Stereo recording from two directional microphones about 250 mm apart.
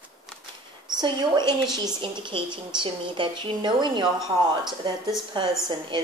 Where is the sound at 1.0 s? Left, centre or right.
Centre.